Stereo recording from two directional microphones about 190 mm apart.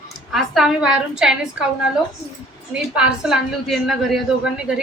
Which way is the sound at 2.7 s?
5° right (ahead or behind).